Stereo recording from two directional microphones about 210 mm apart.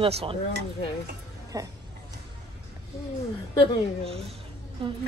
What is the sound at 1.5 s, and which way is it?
Speech, 15° right (ahead or behind).